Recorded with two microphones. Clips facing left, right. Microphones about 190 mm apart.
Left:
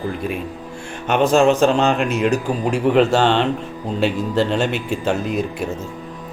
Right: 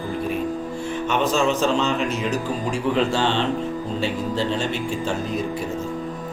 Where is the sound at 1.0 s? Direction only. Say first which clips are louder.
Left 7 dB; 60° left (ahead or behind).